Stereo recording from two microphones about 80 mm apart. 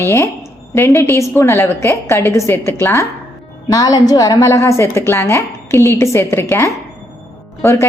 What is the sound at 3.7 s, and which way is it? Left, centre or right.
A woman's voice, left.